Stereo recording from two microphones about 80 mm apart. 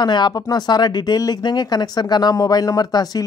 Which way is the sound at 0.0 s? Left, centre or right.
Left.